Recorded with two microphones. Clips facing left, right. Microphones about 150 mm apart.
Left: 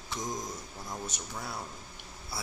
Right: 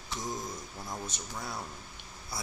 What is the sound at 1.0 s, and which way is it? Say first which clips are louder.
Speech: even; 10° left (ahead or behind).